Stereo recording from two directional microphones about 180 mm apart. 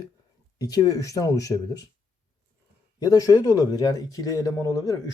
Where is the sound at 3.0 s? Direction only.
20° left (ahead or behind).